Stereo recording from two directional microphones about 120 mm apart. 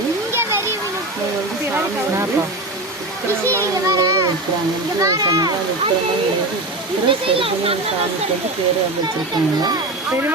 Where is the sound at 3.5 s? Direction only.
25° right (ahead or behind).